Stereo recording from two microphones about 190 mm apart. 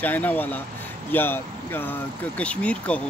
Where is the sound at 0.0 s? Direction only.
10° left (ahead or behind).